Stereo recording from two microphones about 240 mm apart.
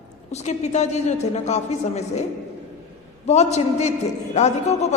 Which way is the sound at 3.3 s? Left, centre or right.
Left.